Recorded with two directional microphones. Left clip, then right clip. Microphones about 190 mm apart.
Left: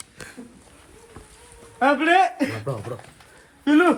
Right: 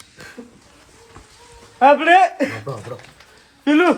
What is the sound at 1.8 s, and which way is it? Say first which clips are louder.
Speech: right 6 dB; 45° right (ahead or behind).